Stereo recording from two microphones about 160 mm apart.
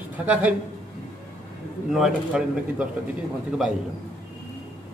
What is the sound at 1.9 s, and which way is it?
Speech, 5° right (ahead or behind).